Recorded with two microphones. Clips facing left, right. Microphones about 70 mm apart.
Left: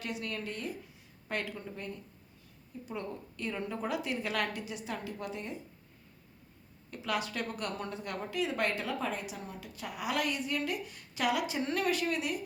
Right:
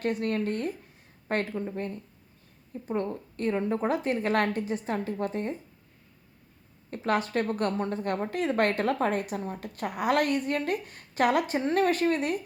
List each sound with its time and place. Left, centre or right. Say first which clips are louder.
0.0 s a woman's voice: right 10 dB; right
6.9 s a woman's voice: right 8 dB; right